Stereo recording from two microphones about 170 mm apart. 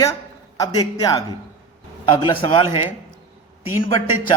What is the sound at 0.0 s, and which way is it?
A man's voice, 20° left (ahead or behind).